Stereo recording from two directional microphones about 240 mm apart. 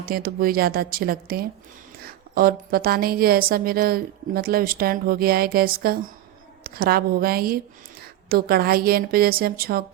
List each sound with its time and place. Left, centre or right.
0.0 s a woman's voice: right